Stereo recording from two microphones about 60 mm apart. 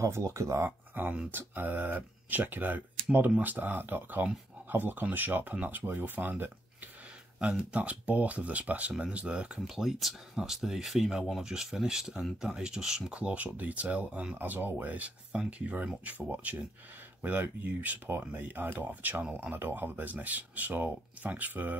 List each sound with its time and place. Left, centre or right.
0.0 s speech: right
0.7 s speech: right
7.3 s speech: centre
9.8 s speech: centre; by 21.7 s right